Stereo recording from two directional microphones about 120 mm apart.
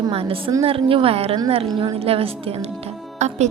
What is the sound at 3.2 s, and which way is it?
Speech, 75° right (ahead or behind).